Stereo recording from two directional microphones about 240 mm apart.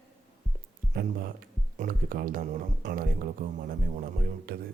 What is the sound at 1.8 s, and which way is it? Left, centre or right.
Speech, right.